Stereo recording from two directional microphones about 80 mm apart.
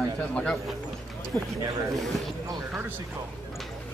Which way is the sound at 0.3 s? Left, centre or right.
Centre.